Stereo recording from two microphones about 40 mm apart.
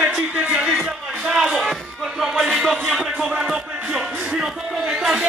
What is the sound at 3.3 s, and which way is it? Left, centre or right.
Music, centre.